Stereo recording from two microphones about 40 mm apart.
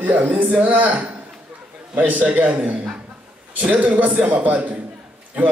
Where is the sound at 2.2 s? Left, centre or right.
Right.